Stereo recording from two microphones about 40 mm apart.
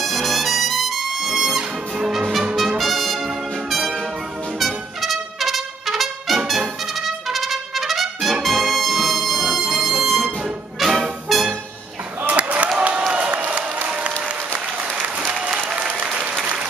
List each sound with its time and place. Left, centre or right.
0.0 s trumpet: centre
2.8 s brass instrument: centre
3.3 s music: centre
4.6 s trumpet: centre
12.4 s a sound: right
12.7 s applause: right
15.3 s applause: right